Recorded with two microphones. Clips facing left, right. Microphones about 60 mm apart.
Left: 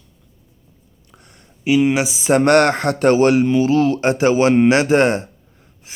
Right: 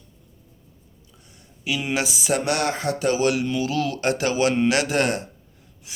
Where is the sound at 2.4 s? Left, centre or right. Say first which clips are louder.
Left 10 dB; left.